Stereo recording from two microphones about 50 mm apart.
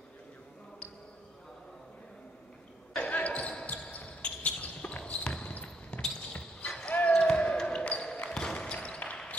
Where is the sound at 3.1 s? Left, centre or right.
Left.